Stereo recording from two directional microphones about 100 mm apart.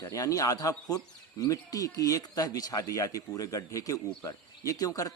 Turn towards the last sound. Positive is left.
turn(degrees=35)  # may be behind; listen again after turning